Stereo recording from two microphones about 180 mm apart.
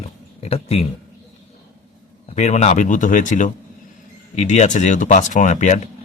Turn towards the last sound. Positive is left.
turn(degrees=40)  # may be behind; listen again after turning